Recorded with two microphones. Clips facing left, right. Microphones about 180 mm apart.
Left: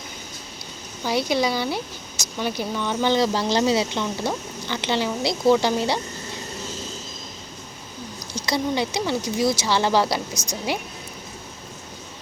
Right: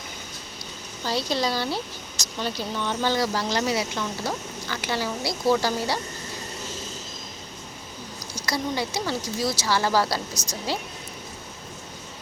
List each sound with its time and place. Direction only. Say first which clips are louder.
1.0 s speech: left 4 dB; 15° left (ahead or behind)
8.5 s speech: left 4 dB; 20° left (ahead or behind)